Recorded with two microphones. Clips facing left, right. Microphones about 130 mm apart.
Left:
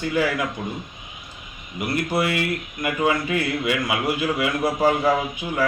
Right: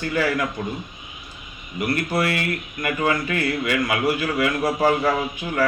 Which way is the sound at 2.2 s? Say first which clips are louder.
Even; 15° left (ahead or behind).